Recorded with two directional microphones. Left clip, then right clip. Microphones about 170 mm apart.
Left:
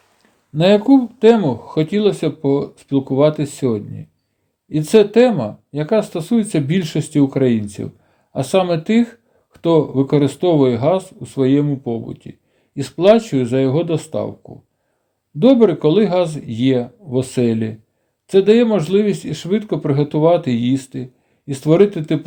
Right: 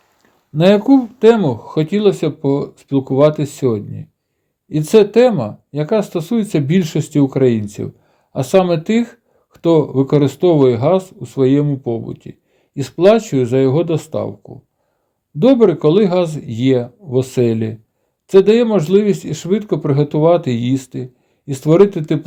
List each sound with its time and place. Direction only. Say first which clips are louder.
0.2 s speech: right 1 dB; 35° right (ahead or behind)